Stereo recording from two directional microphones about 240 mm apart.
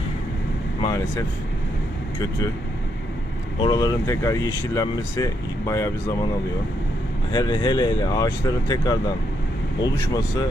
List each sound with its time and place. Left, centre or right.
0.8 s speech: centre
3.6 s speech: centre
7.3 s speech: centre